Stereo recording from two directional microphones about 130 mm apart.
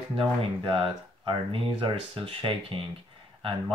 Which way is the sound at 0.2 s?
45° right (ahead or behind).